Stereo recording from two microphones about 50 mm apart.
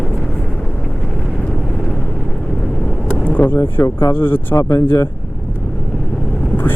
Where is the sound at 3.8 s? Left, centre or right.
Left.